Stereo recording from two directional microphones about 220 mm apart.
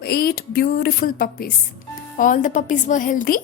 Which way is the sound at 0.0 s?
45° left (ahead or behind).